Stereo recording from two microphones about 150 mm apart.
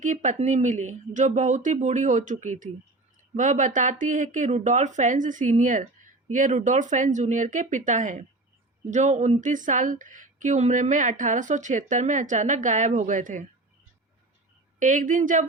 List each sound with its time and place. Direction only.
0.0 s speech: 55° right (ahead or behind)
14.8 s speech: 55° right (ahead or behind)